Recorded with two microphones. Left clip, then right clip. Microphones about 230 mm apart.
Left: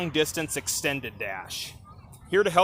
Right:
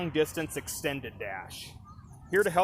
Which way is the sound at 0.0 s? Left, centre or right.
Left.